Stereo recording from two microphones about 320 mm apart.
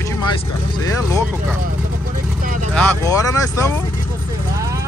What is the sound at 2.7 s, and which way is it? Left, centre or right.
Speech, centre.